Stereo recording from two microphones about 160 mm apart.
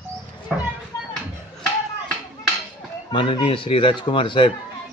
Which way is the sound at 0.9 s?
20° left (ahead or behind).